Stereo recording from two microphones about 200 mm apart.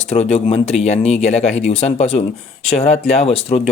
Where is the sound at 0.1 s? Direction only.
30° left (ahead or behind).